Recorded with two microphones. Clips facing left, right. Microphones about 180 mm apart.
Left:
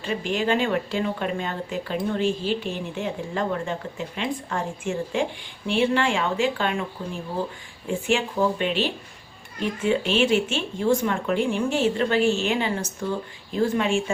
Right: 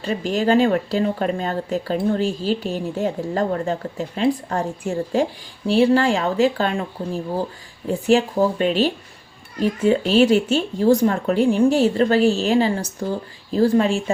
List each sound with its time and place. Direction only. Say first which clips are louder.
0.0 s speech: right 4 dB; 40° right (ahead or behind)